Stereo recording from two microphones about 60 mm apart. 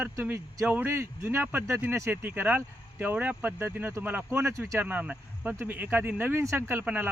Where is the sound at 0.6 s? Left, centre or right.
Right.